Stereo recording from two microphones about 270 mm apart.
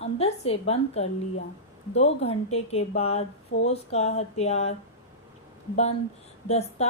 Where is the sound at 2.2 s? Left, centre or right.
Left.